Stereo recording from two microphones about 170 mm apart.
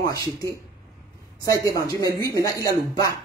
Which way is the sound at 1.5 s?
20° left (ahead or behind).